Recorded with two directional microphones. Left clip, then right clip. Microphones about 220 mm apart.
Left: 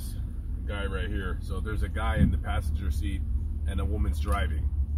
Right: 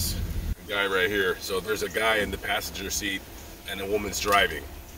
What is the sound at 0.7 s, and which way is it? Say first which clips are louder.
Speech: right 11 dB; 25° right (ahead or behind).